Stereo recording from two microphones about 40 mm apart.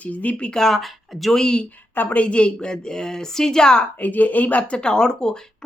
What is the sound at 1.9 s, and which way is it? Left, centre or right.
Speech, left.